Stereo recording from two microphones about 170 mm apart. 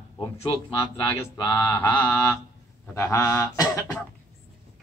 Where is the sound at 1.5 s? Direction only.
10° left (ahead or behind).